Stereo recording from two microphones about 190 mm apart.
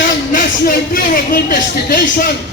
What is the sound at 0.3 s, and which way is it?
Speech, 45° left (ahead or behind).